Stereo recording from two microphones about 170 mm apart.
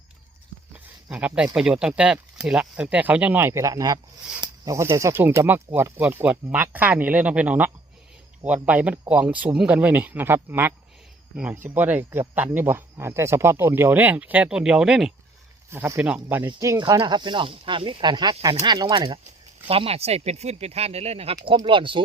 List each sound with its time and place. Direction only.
1.1 s speech: 5° right (ahead or behind)
16.5 s speech: 20° right (ahead or behind); by 21.3 s 40° right (ahead or behind)
21.3 s speech: 30° right (ahead or behind)